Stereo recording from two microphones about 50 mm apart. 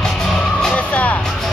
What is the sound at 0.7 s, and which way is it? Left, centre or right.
Music, left.